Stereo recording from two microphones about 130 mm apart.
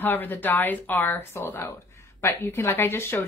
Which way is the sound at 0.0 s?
15° left (ahead or behind).